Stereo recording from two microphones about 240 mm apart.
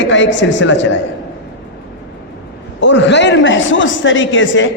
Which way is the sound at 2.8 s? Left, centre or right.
Left.